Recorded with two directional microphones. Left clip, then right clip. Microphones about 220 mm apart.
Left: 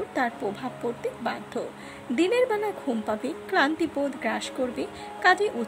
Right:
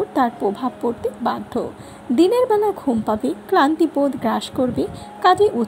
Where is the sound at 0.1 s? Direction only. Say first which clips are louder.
Right 8 dB; 10° right (ahead or behind).